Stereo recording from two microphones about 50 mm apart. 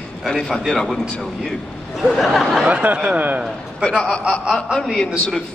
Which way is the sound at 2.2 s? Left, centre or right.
Centre.